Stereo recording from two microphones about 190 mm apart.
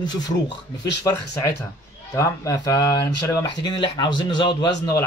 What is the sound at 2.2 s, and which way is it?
Speech, 20° left (ahead or behind).